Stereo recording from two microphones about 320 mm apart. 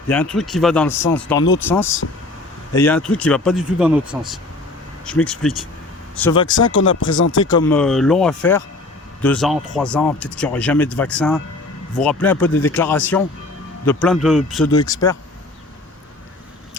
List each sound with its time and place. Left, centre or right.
0.1 s speech: centre
6.6 s speech: left
7.6 s speech: centre